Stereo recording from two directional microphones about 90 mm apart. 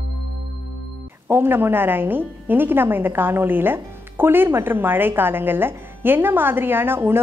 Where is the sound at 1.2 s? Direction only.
25° right (ahead or behind).